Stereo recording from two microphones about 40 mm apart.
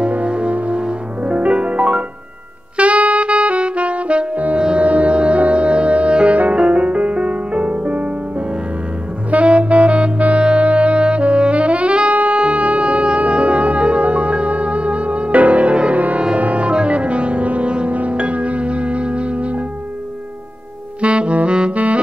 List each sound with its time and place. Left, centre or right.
0.0 s music: right
2.8 s saxophone: right
4.6 s music: right
4.8 s music: right
9.3 s music: right
10.4 s saxophone: right
12.4 s music: right
21.0 s saxophone: right